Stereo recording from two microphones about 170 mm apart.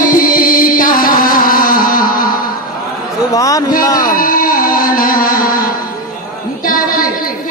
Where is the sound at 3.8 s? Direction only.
25° left (ahead or behind).